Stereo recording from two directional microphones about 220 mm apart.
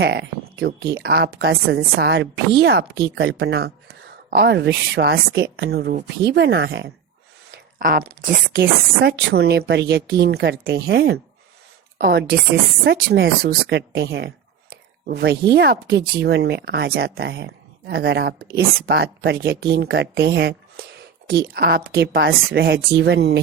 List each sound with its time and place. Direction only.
0.0 s speech: 50° right (ahead or behind)
7.5 s a sound: 40° right (ahead or behind)
9.0 s speech: 45° right (ahead or behind)